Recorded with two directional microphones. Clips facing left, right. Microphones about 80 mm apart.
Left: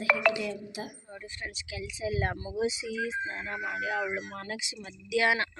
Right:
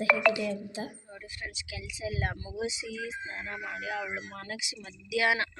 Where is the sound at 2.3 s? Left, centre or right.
Left.